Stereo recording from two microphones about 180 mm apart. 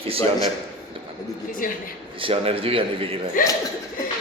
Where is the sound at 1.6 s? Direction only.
50° left (ahead or behind).